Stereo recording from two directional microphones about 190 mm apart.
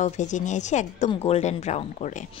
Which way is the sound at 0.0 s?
40° left (ahead or behind).